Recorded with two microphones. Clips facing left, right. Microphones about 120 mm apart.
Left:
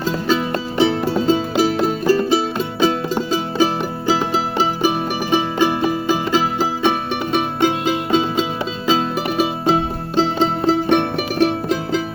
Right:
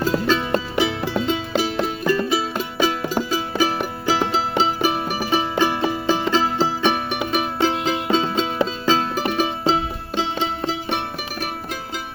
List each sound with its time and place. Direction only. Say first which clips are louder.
0.8 s music: left 9 dB; 35° left (ahead or behind); by 9.7 s 15° left (ahead or behind)
9.7 s music: left 5 dB; 40° left (ahead or behind)
11.3 s music: left 14 dB; 90° left